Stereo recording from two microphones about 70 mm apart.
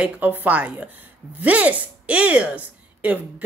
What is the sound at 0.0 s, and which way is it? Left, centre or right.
Speech, right.